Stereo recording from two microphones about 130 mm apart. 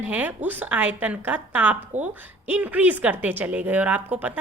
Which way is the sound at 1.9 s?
65° right (ahead or behind).